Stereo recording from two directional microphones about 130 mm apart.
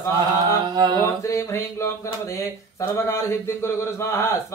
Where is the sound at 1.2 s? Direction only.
20° left (ahead or behind).